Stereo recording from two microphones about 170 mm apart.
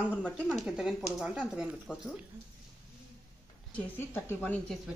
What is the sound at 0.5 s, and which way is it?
Speech, 5° right (ahead or behind).